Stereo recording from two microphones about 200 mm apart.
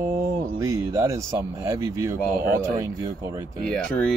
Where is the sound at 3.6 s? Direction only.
5° left (ahead or behind).